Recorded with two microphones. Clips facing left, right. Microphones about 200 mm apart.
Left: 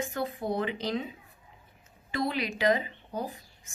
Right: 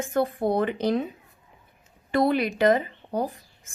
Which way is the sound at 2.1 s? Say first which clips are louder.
Right 9 dB; 55° right (ahead or behind).